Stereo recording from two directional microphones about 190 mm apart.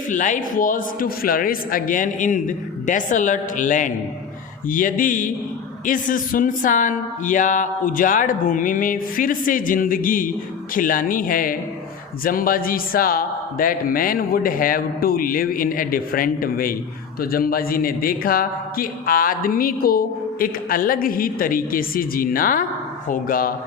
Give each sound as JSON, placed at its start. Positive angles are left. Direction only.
{"t": 0.1, "sound": "a man's voice", "side_deg": 40}